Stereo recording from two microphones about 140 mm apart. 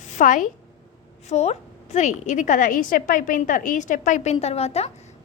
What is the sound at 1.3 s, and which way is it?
A woman's voice, 50° left (ahead or behind).